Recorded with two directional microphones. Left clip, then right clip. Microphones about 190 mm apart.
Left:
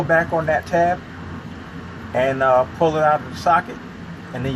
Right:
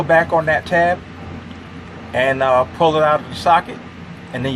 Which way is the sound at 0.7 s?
30° right (ahead or behind).